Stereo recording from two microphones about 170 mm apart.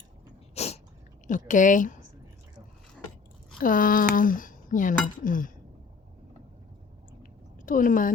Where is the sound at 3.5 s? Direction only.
55° left (ahead or behind).